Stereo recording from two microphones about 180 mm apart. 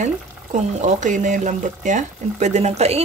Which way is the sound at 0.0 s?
40° right (ahead or behind).